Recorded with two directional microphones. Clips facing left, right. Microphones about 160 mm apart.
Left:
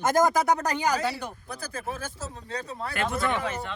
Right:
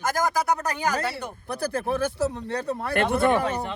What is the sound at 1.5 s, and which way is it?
Speech, 70° right (ahead or behind).